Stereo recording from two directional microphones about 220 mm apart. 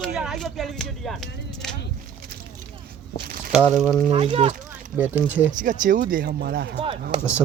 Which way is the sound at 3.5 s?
5° right (ahead or behind).